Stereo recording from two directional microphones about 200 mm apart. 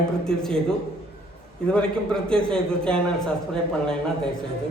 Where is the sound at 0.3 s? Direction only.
5° left (ahead or behind).